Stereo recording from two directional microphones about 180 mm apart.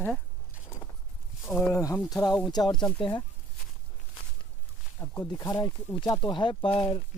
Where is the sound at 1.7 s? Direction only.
15° left (ahead or behind).